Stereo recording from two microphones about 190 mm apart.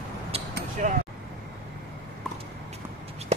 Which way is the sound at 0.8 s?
40° right (ahead or behind).